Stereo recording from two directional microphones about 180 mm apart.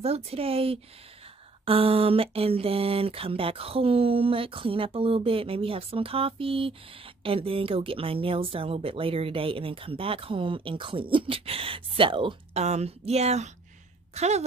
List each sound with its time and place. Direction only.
0.0 s speech: 35° right (ahead or behind)